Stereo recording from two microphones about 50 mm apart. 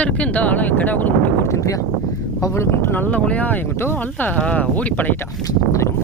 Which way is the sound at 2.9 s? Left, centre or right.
Left.